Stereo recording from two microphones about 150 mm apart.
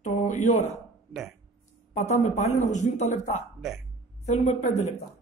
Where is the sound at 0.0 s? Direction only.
55° left (ahead or behind).